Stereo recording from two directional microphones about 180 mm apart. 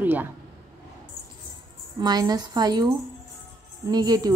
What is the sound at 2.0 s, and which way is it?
Speech, 20° right (ahead or behind).